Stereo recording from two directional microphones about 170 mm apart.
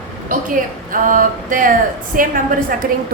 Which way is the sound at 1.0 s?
50° right (ahead or behind).